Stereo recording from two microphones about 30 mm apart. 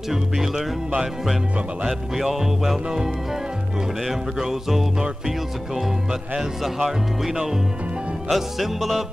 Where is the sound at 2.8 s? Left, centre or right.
Centre.